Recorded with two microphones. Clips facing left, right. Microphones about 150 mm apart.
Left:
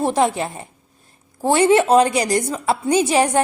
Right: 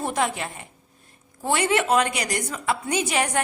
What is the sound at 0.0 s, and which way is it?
Speech, 30° left (ahead or behind).